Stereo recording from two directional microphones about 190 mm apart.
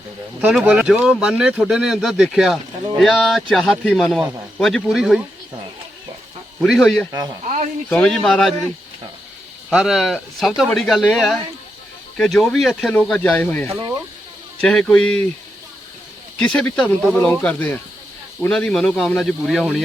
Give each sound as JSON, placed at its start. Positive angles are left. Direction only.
{"t": 0.4, "sound": "speech", "side_deg": -5}
{"t": 6.6, "sound": "speech", "side_deg": 0}
{"t": 7.1, "sound": "speech", "side_deg": -20}
{"t": 7.4, "sound": "speech", "side_deg": -40}
{"t": 7.9, "sound": "speech", "side_deg": 5}
{"t": 9.6, "sound": "speech", "side_deg": 0}
{"t": 16.4, "sound": "speech", "side_deg": 5}